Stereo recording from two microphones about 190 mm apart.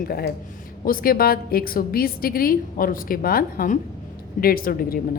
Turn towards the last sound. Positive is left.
turn(degrees=50)  # may be behind; listen again after turning